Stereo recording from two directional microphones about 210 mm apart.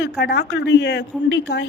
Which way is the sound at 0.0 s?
50° left (ahead or behind).